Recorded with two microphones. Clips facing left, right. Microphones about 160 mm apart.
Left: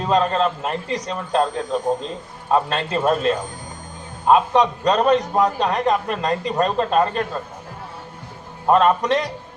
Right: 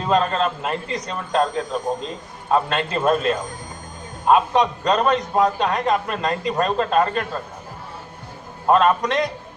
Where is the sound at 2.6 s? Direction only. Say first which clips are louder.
Even; 35° left (ahead or behind).